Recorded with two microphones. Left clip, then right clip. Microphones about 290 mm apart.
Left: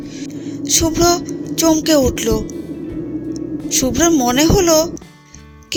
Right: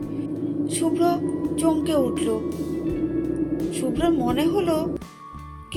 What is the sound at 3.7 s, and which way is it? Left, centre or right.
Music, left.